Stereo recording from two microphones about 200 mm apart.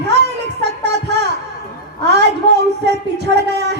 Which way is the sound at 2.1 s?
55° right (ahead or behind).